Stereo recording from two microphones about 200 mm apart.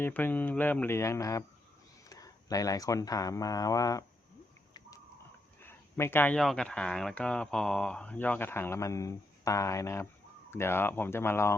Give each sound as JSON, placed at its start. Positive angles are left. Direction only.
{"t": 0.0, "sound": "speech", "side_deg": 10}
{"t": 5.6, "sound": "speech", "side_deg": 10}